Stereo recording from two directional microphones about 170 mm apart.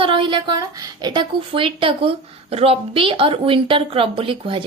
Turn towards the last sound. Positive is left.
turn(degrees=-30)  # may be behind; listen again after turning